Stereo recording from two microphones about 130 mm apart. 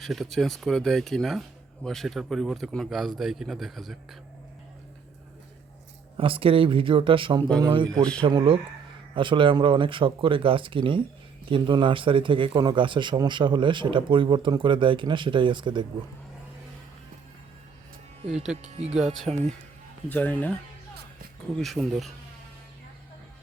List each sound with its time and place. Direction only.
0.0 s speech: centre (ahead or behind)
6.1 s a man's voice: 45° right (ahead or behind)
18.3 s speech: 5° right (ahead or behind)
18.5 s speech: 60° right (ahead or behind)
19.3 s speech: centre (ahead or behind)
20.1 s speech: 10° left (ahead or behind)